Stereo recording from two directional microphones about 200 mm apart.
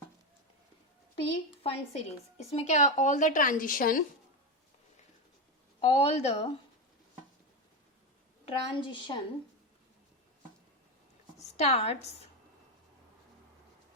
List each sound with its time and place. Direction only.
1.2 s speech: 30° left (ahead or behind)
5.8 s speech: 30° left (ahead or behind)
8.4 s a woman's voice: 25° left (ahead or behind)
11.5 s speech: 30° left (ahead or behind)